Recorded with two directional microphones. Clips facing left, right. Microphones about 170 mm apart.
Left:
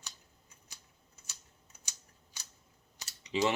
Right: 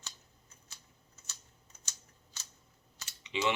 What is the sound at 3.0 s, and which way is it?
Typing, 40° left (ahead or behind).